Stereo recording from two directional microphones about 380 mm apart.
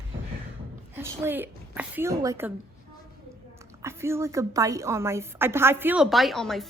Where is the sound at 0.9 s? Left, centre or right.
Centre.